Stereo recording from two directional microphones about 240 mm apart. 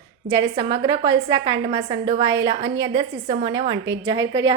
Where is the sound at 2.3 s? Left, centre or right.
Right.